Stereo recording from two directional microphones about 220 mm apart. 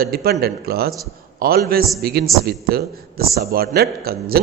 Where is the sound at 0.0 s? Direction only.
45° right (ahead or behind).